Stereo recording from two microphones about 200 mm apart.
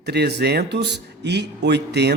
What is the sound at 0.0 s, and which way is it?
Speech, 55° right (ahead or behind).